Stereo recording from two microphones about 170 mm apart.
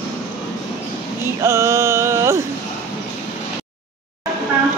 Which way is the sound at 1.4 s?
15° right (ahead or behind).